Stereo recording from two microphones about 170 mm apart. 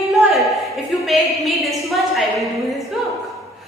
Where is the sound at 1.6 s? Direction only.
Centre (ahead or behind).